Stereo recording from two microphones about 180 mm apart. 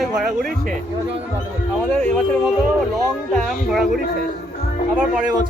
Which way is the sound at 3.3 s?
Centre (ahead or behind).